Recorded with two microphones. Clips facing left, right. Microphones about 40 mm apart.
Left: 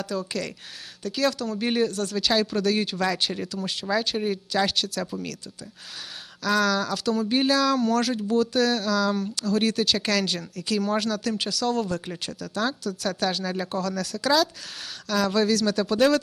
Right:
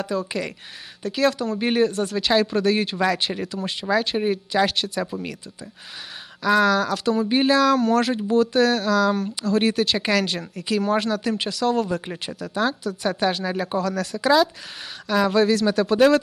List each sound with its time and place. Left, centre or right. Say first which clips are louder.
0.1 s speech: right 2 dB; centre
6.4 s speech: right 5 dB; centre